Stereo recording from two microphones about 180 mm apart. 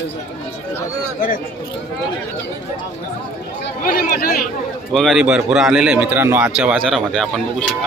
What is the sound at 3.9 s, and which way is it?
Speech, 50° left (ahead or behind).